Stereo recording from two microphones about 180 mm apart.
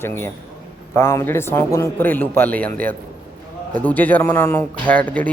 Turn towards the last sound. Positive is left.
turn(degrees=10)  # may be behind; listen again after turning